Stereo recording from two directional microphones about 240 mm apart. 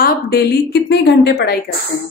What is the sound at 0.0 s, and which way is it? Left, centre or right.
A woman's voice, left.